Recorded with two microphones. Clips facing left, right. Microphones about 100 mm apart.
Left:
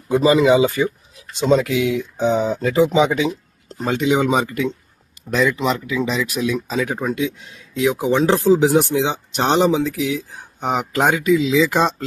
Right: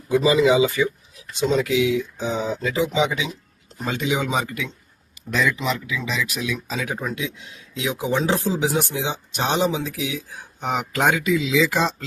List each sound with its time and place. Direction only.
0.1 s speech: 45° left (ahead or behind)
7.9 s speech: 55° left (ahead or behind)
10.6 s speech: 40° left (ahead or behind)